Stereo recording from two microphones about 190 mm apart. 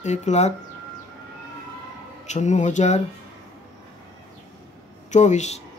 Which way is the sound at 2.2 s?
40° left (ahead or behind).